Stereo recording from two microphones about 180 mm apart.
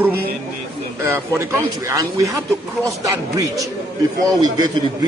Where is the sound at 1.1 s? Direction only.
15° right (ahead or behind).